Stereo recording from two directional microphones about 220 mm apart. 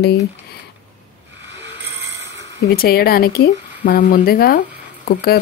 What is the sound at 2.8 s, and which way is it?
Speech, 45° left (ahead or behind).